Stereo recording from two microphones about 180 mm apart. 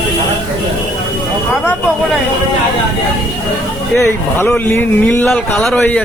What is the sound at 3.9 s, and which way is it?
Speech, 15° left (ahead or behind).